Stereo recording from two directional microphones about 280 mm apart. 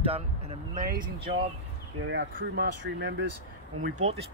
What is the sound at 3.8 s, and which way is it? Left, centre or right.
Speech, right.